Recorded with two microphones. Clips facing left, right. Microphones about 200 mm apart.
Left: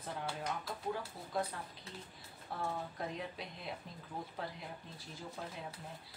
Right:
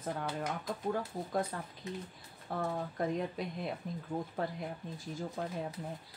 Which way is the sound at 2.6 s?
50° right (ahead or behind).